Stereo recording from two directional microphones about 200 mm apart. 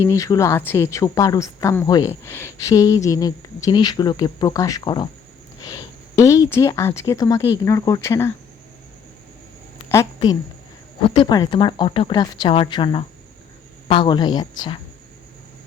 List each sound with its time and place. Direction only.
0.0 s speech: 15° left (ahead or behind)
9.9 s a woman's voice: 15° left (ahead or behind)
11.0 s speech: 25° left (ahead or behind)